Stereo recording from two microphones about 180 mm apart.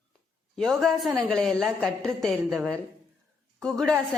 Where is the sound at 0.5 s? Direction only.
Centre (ahead or behind).